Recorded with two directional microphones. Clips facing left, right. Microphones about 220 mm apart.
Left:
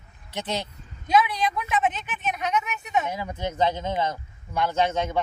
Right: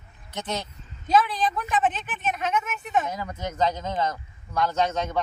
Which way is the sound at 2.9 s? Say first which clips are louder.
Even; 10° left (ahead or behind).